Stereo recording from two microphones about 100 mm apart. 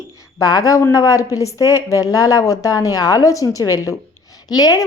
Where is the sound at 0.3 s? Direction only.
40° left (ahead or behind).